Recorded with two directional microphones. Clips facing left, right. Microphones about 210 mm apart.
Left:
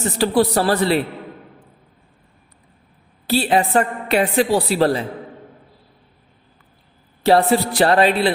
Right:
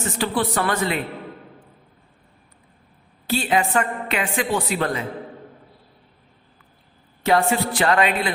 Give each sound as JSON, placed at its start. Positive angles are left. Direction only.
{"t": 0.0, "sound": "a woman's voice", "side_deg": 35}
{"t": 3.2, "sound": "a woman's voice", "side_deg": 35}
{"t": 7.2, "sound": "a woman's voice", "side_deg": 35}